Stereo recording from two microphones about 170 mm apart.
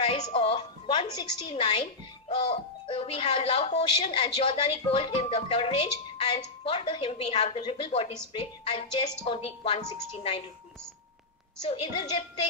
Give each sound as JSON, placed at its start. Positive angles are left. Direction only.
{"t": 0.0, "sound": "music", "side_deg": 35}
{"t": 1.5, "sound": "a child's voice", "side_deg": 35}
{"t": 11.6, "sound": "a child's voice", "side_deg": 35}